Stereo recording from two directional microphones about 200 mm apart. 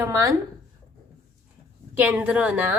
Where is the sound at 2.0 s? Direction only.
10° right (ahead or behind).